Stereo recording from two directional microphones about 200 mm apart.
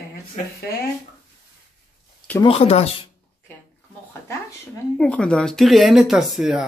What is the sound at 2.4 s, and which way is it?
Speech, 30° left (ahead or behind).